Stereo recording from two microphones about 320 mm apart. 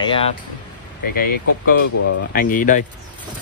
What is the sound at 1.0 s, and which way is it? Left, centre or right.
Speech, left.